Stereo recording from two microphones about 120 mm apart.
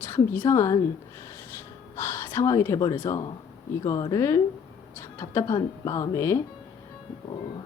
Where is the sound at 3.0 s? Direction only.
40° left (ahead or behind); by 6.4 s 25° left (ahead or behind).